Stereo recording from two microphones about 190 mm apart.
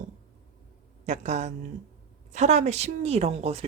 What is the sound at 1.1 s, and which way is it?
Speech, 35° right (ahead or behind).